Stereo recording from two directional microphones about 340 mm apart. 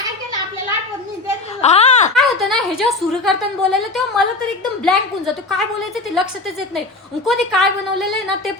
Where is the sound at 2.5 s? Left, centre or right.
Centre.